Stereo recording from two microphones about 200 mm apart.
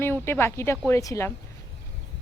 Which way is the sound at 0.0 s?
10° left (ahead or behind).